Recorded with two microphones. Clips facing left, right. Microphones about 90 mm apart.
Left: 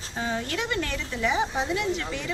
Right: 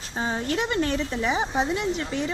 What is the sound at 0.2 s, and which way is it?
Speech, 30° right (ahead or behind).